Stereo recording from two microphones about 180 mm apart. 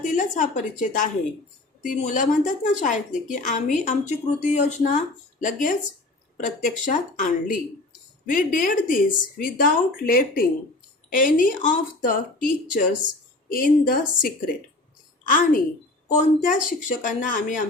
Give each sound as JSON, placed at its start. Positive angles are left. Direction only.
{"t": 0.0, "sound": "a woman's voice", "side_deg": 45}
{"t": 6.8, "sound": "a woman's voice", "side_deg": 45}